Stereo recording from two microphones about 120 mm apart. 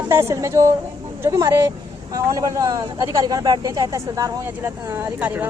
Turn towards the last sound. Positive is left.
turn(degrees=-15)  # may be behind; listen again after turning